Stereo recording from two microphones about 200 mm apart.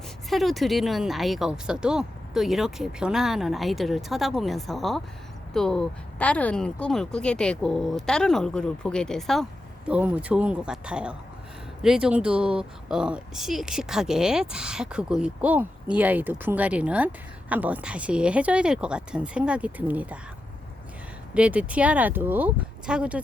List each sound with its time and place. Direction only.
0.3 s speech: centre (ahead or behind)
21.3 s speech: 5° right (ahead or behind)